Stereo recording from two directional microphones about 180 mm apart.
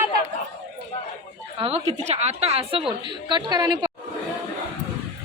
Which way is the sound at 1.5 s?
30° right (ahead or behind).